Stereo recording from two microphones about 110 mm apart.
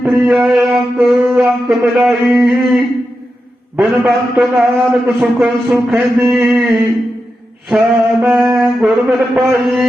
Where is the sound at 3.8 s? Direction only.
Centre (ahead or behind).